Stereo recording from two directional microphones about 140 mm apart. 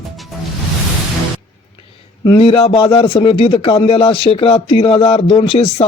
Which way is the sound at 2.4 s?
45° left (ahead or behind).